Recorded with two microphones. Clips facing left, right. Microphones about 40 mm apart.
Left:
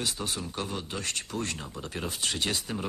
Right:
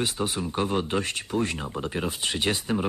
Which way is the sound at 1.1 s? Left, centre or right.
Centre.